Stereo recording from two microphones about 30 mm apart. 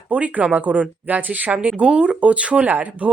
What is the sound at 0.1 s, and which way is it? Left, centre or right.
Speech, right.